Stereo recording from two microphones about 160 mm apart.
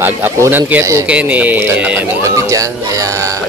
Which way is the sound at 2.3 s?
20° right (ahead or behind).